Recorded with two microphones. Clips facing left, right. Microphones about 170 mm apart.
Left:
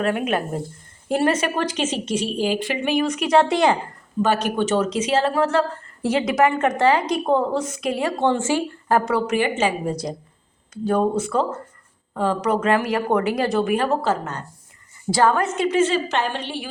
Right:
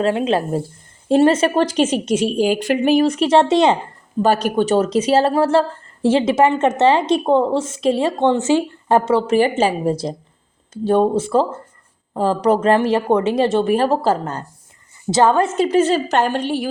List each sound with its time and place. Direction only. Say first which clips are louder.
0.0 s a woman's voice: right 4 dB; 25° right (ahead or behind)
1.7 s speech: right 6 dB; 45° right (ahead or behind); by 3.8 s 25° right (ahead or behind)
4.2 s a woman's voice: right 4 dB; 35° right (ahead or behind)